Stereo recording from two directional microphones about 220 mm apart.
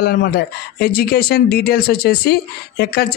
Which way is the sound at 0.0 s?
45° left (ahead or behind).